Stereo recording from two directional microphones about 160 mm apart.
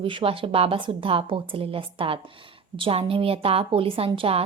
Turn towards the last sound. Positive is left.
turn(degrees=-35)  # may be behind; listen again after turning